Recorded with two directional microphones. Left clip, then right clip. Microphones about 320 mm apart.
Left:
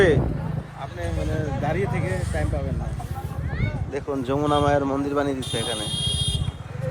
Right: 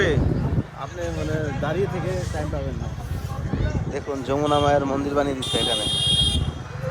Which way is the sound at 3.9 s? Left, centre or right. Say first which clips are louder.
Even; centre.